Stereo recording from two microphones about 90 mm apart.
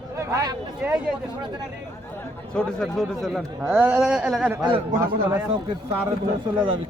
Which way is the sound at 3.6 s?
20° right (ahead or behind).